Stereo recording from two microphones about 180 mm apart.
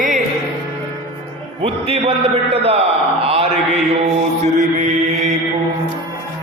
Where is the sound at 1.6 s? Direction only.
35° right (ahead or behind).